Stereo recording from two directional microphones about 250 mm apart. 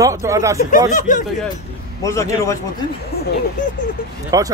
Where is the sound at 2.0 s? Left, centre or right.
Centre.